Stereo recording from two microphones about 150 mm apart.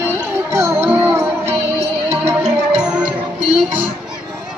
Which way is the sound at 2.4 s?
5° right (ahead or behind).